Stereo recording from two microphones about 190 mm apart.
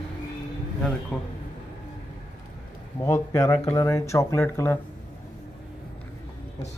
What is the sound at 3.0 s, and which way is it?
Speech, 15° left (ahead or behind).